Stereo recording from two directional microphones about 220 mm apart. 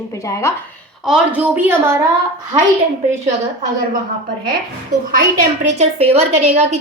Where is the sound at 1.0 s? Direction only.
5° right (ahead or behind).